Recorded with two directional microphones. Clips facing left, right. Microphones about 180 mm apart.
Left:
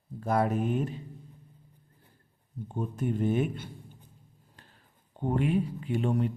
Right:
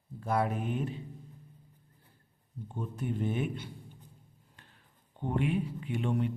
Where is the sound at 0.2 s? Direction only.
45° left (ahead or behind).